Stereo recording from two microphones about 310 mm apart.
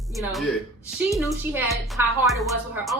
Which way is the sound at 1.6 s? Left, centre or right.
Centre.